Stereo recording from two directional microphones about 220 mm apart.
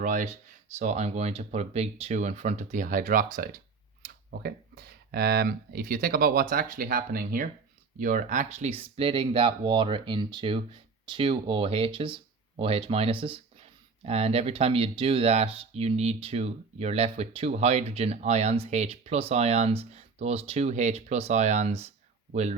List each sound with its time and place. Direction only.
0.0 s speech: 35° right (ahead or behind)